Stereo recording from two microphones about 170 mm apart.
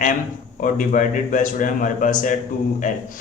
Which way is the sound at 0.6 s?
50° left (ahead or behind).